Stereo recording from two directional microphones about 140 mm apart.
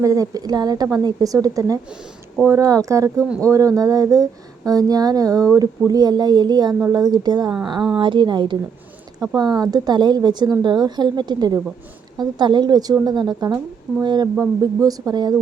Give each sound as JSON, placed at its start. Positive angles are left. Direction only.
{"t": 0.0, "sound": "a woman's voice", "side_deg": -25}